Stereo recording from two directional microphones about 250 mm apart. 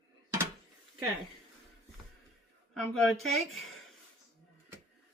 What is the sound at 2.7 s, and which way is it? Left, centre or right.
Speech, centre.